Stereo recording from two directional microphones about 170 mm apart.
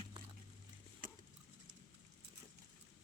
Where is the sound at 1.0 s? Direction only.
55° right (ahead or behind).